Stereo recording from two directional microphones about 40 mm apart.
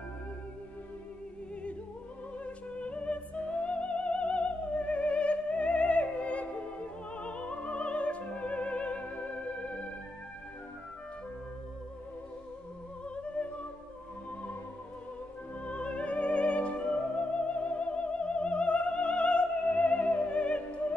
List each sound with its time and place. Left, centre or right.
2.4 s music: left
13.1 s music: left
15.6 s music: left